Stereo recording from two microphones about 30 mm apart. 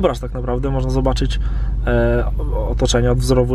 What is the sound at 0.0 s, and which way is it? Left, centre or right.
Speech, centre.